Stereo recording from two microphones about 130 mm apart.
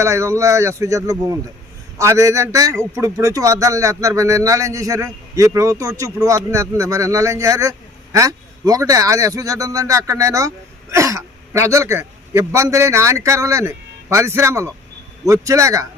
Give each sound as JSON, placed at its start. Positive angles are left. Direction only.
{"t": 0.0, "sound": "speech", "side_deg": -20}